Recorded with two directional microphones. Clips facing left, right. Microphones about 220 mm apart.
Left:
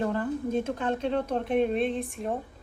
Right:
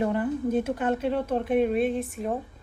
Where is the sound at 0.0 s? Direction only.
15° right (ahead or behind).